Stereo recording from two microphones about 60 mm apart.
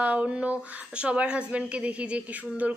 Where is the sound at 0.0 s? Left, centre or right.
Right.